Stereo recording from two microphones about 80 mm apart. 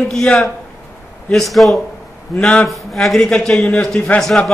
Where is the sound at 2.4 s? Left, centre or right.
Centre.